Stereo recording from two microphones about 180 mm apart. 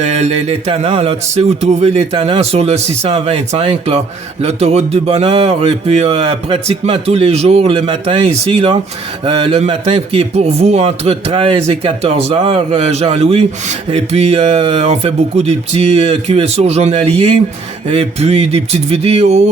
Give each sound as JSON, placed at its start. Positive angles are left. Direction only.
{"t": 0.0, "sound": "a man's voice", "side_deg": -35}